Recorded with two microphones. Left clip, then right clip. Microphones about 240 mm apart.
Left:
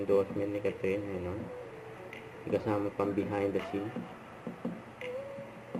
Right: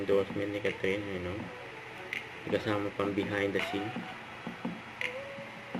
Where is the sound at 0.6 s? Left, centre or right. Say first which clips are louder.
Right 2 dB; centre.